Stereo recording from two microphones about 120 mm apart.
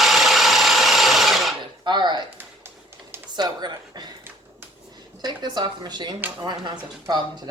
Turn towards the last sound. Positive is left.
turn(degrees=-40)  # may be behind; listen again after turning